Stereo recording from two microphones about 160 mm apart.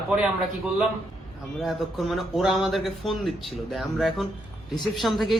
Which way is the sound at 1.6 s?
Centre (ahead or behind).